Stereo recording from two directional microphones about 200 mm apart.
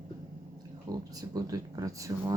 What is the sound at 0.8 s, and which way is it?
Speech, 20° right (ahead or behind).